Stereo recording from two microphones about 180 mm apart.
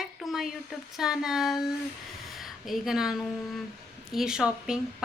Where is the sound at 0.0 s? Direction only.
Centre (ahead or behind).